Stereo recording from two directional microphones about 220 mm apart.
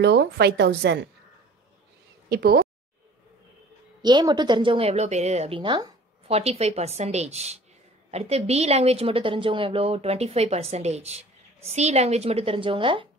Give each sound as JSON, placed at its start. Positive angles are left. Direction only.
{"t": 0.0, "sound": "a woman's voice", "side_deg": -50}
{"t": 2.2, "sound": "speech", "side_deg": -45}
{"t": 4.0, "sound": "a woman's voice", "side_deg": -20}